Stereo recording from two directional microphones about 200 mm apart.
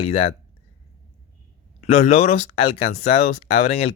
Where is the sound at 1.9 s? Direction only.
35° left (ahead or behind).